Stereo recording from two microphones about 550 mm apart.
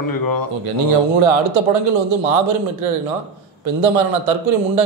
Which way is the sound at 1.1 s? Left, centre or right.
Right.